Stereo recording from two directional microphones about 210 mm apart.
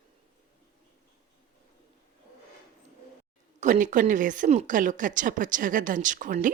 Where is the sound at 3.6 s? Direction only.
35° right (ahead or behind).